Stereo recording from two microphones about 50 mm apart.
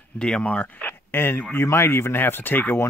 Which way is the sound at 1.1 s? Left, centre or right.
Left.